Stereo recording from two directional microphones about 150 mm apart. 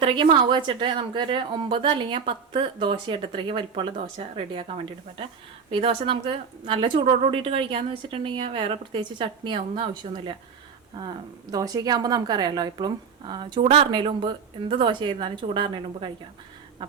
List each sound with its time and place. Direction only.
0.0 s a woman's voice: 35° right (ahead or behind)
5.7 s a woman's voice: 35° right (ahead or behind)